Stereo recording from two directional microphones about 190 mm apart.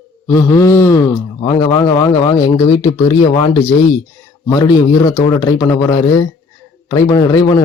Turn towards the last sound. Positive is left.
turn(degrees=20)  # may be behind; listen again after turning